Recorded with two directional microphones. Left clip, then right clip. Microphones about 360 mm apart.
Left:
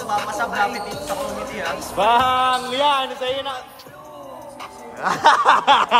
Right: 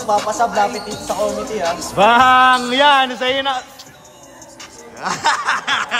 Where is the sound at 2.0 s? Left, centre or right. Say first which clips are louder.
Right 6 dB; right.